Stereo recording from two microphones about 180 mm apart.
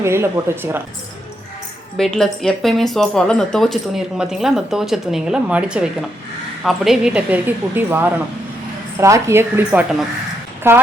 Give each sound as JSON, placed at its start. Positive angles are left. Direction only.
{"t": 0.0, "sound": "a woman's voice", "side_deg": -15}
{"t": 2.0, "sound": "a woman's voice", "side_deg": 5}